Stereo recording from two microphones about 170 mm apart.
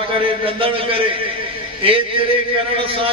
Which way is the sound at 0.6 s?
30° right (ahead or behind).